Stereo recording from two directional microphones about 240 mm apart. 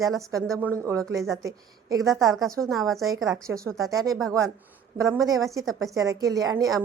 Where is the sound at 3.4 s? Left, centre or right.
Centre.